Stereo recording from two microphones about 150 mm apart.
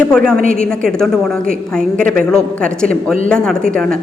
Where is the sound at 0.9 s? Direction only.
Centre (ahead or behind).